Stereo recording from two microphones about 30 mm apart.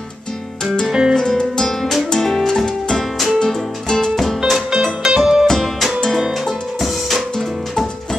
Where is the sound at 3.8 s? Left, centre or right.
Left.